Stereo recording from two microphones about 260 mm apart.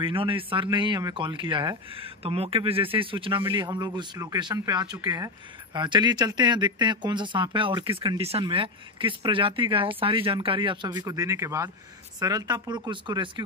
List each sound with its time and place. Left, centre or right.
0.0 s speech: centre